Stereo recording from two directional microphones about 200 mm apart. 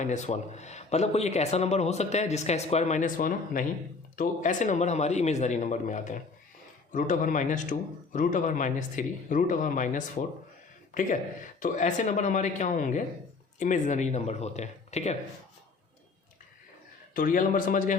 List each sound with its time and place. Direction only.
0.0 s speech: 35° left (ahead or behind)
17.2 s a man's voice: 45° left (ahead or behind)